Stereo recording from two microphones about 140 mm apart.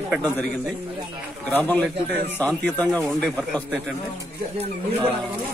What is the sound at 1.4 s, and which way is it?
Speech, 10° left (ahead or behind).